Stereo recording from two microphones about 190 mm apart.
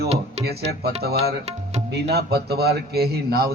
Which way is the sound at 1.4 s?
35° right (ahead or behind).